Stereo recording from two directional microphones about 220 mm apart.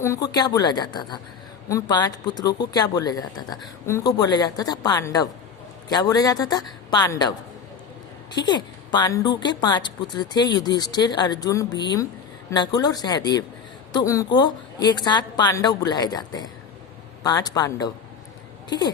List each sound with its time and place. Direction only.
0.0 s a woman's voice: 15° left (ahead or behind)
8.4 s a woman's voice: 20° left (ahead or behind)